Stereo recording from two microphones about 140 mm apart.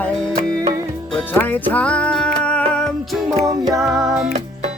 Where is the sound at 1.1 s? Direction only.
10° left (ahead or behind).